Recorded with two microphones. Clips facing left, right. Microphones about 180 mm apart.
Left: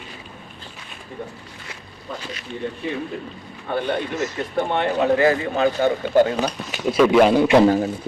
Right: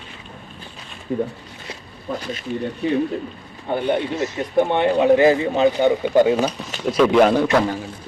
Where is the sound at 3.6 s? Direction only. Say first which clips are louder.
Right 3 dB; 15° right (ahead or behind).